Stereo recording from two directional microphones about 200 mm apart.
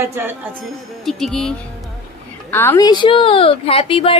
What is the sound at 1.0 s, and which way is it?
Speech, centre (ahead or behind).